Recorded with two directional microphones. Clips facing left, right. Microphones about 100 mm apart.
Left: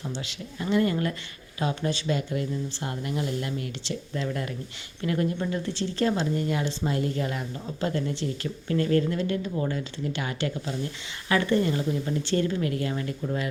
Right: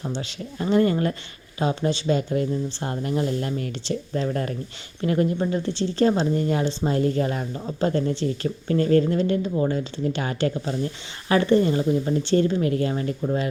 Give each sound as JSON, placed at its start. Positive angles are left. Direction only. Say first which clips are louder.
{"t": 0.2, "sound": "speech", "louder": "right 5 dB", "side_deg": -35}